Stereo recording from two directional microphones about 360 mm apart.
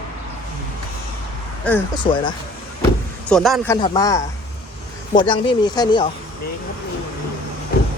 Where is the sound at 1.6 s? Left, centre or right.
Centre.